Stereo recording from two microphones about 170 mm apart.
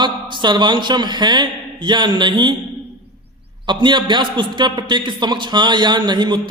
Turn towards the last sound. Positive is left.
turn(degrees=-25)  # may be behind; listen again after turning